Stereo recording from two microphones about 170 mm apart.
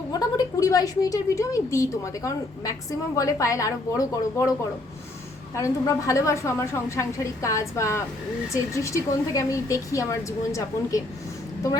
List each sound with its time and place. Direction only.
0.1 s a woman's voice: 20° left (ahead or behind)
5.5 s a woman's voice: 20° left (ahead or behind)